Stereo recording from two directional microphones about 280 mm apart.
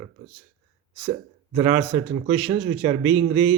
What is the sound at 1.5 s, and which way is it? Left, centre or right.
A man's voice, centre.